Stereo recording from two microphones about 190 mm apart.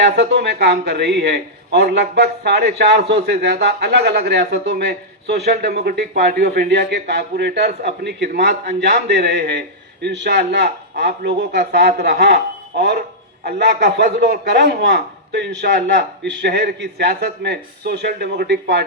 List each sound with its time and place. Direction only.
0.0 s a man's voice: 65° right (ahead or behind)